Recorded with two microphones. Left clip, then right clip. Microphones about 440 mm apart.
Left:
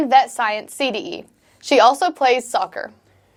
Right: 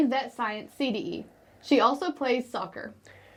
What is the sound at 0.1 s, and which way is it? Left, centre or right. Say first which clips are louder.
A woman's voice: left 14 dB; left.